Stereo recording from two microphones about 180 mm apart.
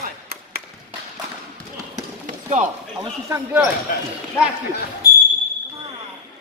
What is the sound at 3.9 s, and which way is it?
Speech, 55° left (ahead or behind).